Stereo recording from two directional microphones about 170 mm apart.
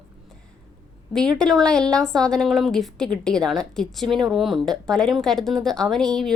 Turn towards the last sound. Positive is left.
turn(degrees=5)  # may be behind; listen again after turning